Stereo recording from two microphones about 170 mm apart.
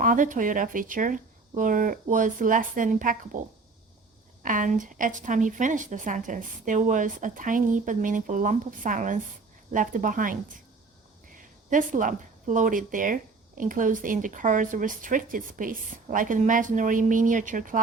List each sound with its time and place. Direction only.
0.0 s a woman's voice: 50° right (ahead or behind)
4.4 s a woman's voice: 50° right (ahead or behind)